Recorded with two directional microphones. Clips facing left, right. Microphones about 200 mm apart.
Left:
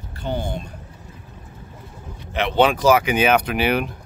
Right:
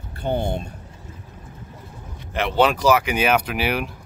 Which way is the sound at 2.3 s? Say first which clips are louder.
Left 1 dB; 5° right (ahead or behind).